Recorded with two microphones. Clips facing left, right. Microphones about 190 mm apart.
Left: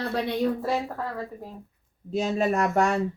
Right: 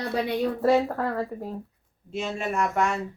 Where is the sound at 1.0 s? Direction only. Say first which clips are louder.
Right 5 dB; 70° right (ahead or behind).